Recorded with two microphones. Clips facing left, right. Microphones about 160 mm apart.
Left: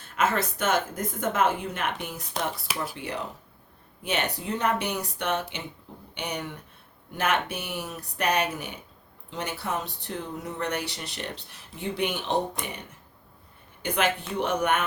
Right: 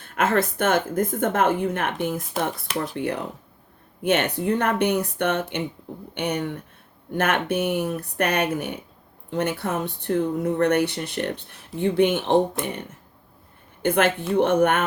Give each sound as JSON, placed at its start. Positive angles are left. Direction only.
{"t": 0.0, "sound": "a woman's voice", "side_deg": -55}
{"t": 13.8, "sound": "a woman's voice", "side_deg": -55}